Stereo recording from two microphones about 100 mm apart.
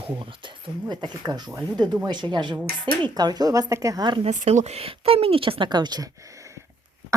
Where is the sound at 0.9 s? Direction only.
45° right (ahead or behind).